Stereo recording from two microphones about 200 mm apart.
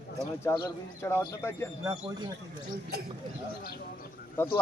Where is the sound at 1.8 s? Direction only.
15° right (ahead or behind).